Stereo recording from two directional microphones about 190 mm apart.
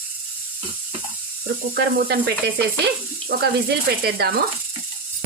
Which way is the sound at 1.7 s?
55° right (ahead or behind).